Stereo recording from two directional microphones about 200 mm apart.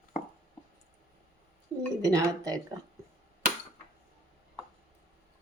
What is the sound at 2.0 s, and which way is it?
Speech, 15° right (ahead or behind).